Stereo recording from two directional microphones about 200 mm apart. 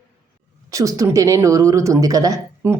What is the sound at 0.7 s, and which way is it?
Speech, 15° right (ahead or behind).